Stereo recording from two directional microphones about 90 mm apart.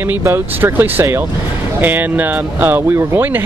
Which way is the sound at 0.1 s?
25° right (ahead or behind).